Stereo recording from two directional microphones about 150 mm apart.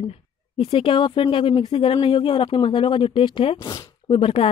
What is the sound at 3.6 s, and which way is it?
Speech, 25° left (ahead or behind).